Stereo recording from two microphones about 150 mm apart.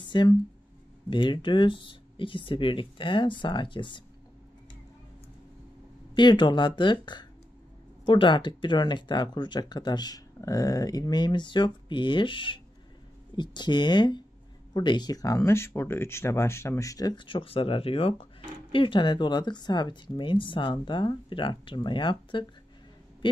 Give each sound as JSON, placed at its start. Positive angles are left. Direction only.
{"t": 0.0, "sound": "speech", "side_deg": 30}
{"t": 6.1, "sound": "speech", "side_deg": 30}